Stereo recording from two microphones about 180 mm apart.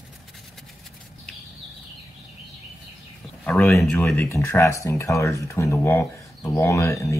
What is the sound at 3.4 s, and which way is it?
Speech, 5° left (ahead or behind).